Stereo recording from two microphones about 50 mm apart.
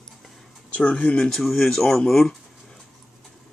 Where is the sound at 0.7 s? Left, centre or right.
Left.